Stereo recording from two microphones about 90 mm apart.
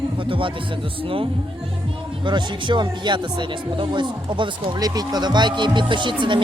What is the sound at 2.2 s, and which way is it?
Speech, 60° right (ahead or behind).